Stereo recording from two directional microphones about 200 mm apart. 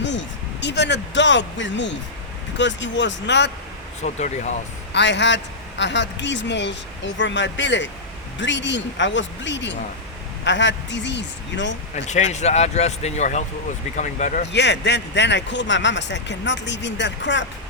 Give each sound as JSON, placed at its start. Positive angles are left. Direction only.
{"t": 0.0, "sound": "a man's voice", "side_deg": 65}
{"t": 4.0, "sound": "speech", "side_deg": 35}
{"t": 4.9, "sound": "a man's voice", "side_deg": 60}
{"t": 11.9, "sound": "speech", "side_deg": 35}
{"t": 14.5, "sound": "a man's voice", "side_deg": 60}